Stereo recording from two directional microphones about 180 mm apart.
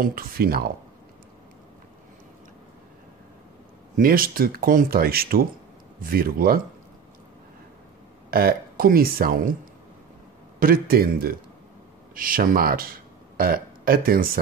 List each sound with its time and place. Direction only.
0.0 s speech: 55° right (ahead or behind)
3.9 s speech: 50° right (ahead or behind)
8.3 s speech: 55° right (ahead or behind)
10.6 s a man's voice: 55° right (ahead or behind)